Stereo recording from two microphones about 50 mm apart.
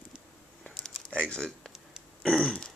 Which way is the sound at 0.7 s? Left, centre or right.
Centre.